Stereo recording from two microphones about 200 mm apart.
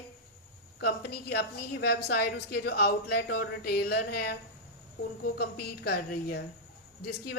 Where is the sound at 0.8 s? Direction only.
55° left (ahead or behind).